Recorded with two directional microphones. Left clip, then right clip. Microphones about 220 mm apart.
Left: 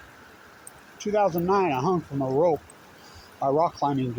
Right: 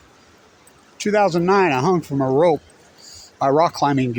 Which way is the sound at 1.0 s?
50° right (ahead or behind).